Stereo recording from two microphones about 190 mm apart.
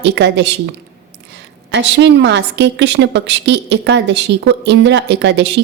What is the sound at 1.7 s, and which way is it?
A woman's voice, 70° right (ahead or behind).